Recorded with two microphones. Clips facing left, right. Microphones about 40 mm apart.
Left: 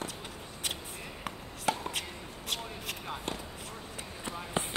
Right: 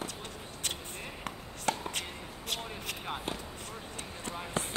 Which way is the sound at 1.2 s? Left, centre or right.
Centre.